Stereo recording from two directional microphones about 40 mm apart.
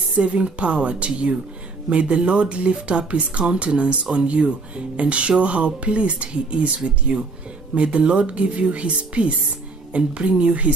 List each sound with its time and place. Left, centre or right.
0.1 s speech: right